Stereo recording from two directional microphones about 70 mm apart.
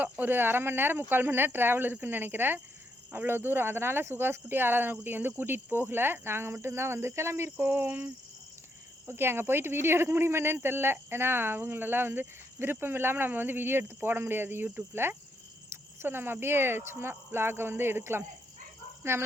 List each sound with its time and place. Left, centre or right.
0.0 s speech: right
7.6 s cricket: right
9.0 s speech: right